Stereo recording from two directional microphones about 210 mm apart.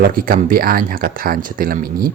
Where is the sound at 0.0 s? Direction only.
45° right (ahead or behind).